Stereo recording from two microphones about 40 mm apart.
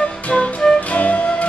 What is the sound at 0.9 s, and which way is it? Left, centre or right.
Flute, left.